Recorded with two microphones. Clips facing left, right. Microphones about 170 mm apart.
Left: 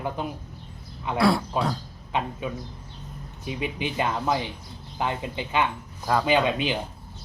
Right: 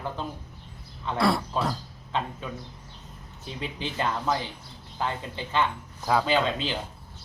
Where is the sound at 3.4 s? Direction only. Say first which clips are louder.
Left 5 dB; 15° left (ahead or behind).